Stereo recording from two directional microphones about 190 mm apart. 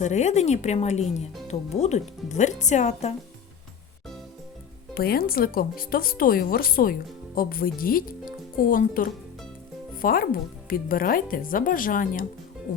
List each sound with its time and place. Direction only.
0.0 s speech: 40° left (ahead or behind)
4.9 s speech: 50° left (ahead or behind)